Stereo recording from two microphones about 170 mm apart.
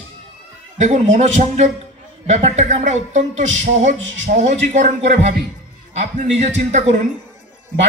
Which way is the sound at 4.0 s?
90° right.